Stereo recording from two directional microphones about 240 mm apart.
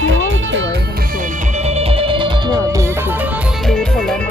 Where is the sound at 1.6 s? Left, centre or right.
Right.